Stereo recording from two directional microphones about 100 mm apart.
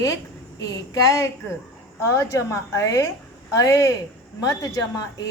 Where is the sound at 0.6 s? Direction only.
35° left (ahead or behind).